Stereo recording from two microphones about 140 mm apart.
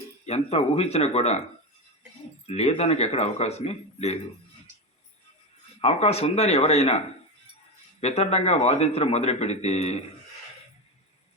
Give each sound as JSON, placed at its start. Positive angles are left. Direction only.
{"t": 0.3, "sound": "a man's voice", "side_deg": 45}
{"t": 2.5, "sound": "a man's voice", "side_deg": 50}
{"t": 5.8, "sound": "a man's voice", "side_deg": 50}
{"t": 8.0, "sound": "a man's voice", "side_deg": 50}